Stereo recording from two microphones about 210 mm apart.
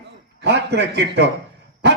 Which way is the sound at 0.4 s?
55° right (ahead or behind).